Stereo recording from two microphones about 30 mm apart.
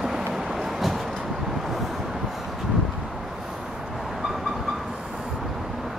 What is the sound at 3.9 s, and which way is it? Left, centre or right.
Vehicle, centre.